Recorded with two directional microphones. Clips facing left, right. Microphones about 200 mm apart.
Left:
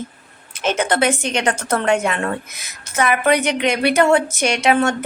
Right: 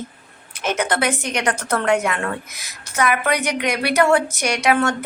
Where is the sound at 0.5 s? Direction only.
25° left (ahead or behind).